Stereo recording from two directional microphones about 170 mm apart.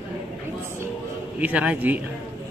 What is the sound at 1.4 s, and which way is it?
Speech, 10° right (ahead or behind).